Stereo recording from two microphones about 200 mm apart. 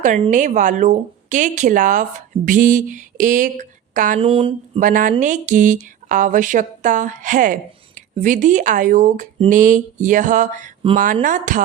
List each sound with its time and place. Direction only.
0.2 s speech: 40° right (ahead or behind)
4.3 s speech: 30° right (ahead or behind)
4.8 s speech: 40° right (ahead or behind)